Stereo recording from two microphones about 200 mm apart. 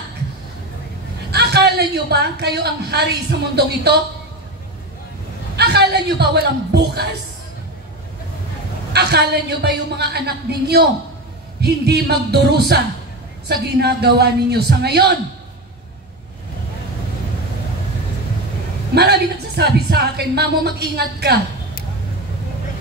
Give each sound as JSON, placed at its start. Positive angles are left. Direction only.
{"t": 1.3, "sound": "a man's voice", "side_deg": -55}
{"t": 5.6, "sound": "a woman's voice", "side_deg": -55}
{"t": 8.9, "sound": "a man's voice", "side_deg": -55}
{"t": 18.9, "sound": "a man's voice", "side_deg": -55}